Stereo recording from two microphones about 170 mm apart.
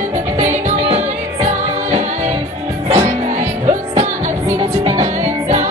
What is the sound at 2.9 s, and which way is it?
Music, 40° right (ahead or behind).